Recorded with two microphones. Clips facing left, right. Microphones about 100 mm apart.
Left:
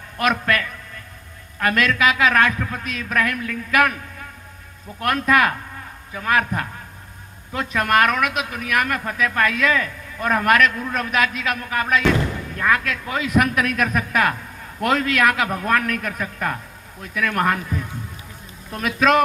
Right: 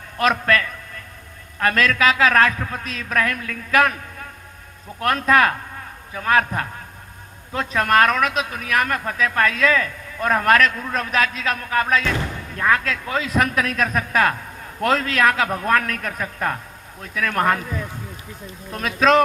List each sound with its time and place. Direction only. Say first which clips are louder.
0.2 s a man's voice: right 2 dB; 30° right (ahead or behind)
4.9 s a man's voice: right 1 dB; 35° right (ahead or behind)
18.8 s speech: right 1 dB; 30° right (ahead or behind)